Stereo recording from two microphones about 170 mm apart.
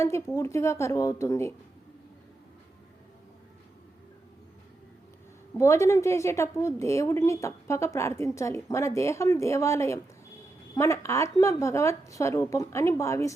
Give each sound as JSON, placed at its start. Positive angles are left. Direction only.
{"t": 0.3, "sound": "a woman's voice", "side_deg": 15}
{"t": 5.5, "sound": "a woman's voice", "side_deg": 15}